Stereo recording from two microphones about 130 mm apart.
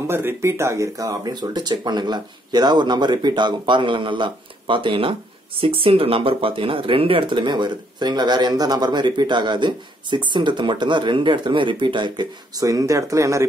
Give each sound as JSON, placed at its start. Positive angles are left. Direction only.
{"t": 0.0, "sound": "speech", "side_deg": -20}